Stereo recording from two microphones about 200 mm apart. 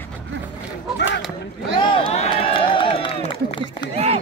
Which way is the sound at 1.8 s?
25° left (ahead or behind).